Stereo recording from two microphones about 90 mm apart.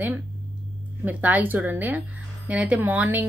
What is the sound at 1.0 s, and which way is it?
A woman's voice, 20° right (ahead or behind).